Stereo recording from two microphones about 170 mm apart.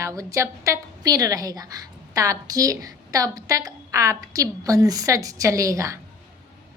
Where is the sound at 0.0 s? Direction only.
20° right (ahead or behind).